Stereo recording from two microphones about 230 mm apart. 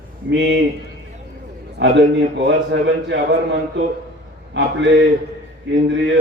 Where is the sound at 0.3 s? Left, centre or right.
Right.